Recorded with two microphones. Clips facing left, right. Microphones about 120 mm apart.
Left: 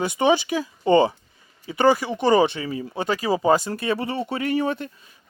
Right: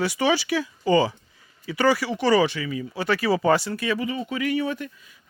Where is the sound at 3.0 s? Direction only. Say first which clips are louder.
Even; 20° left (ahead or behind).